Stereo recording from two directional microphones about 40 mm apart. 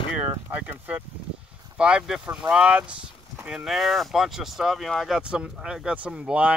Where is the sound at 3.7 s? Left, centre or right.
Centre.